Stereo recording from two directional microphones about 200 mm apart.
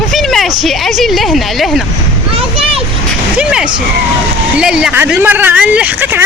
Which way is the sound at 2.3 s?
30° right (ahead or behind).